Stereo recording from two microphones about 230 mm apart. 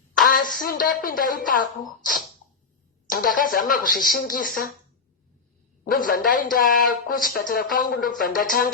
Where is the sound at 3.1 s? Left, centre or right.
Left.